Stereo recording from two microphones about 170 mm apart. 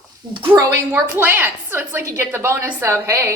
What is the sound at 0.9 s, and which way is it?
A woman's voice, 10° right (ahead or behind).